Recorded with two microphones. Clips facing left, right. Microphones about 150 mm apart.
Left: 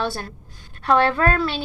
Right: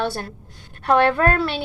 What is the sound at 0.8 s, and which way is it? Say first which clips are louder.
Speech: right 1 dB; 55° right (ahead or behind).